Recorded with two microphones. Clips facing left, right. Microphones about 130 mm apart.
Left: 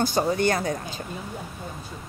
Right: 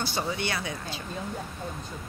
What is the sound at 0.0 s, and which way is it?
Speech, 45° left (ahead or behind).